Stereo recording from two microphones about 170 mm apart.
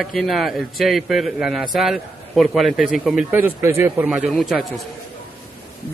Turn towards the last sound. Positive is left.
turn(degrees=0)  # may be behind; listen again after turning